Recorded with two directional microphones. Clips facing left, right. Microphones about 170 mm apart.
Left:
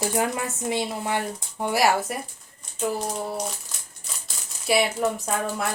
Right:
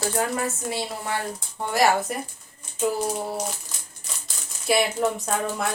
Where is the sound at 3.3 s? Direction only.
Centre (ahead or behind).